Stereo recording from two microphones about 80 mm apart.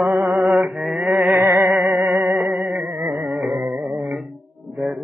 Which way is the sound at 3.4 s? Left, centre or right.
Centre.